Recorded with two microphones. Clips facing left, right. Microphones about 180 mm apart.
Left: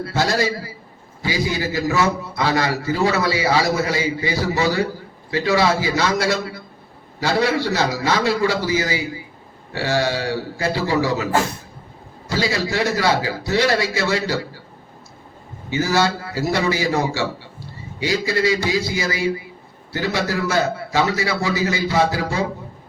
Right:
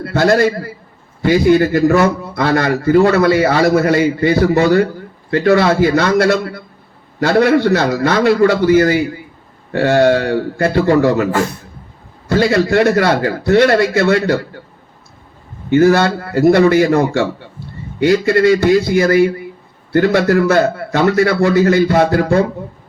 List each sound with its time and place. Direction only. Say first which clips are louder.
0.0 s a man's voice: right 8 dB; 55° right (ahead or behind)
12.3 s a man's voice: right 9 dB; 55° right (ahead or behind)
15.7 s a man's voice: right 9 dB; 55° right (ahead or behind)